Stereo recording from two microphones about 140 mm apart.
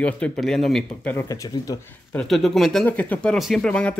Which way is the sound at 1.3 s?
25° left (ahead or behind).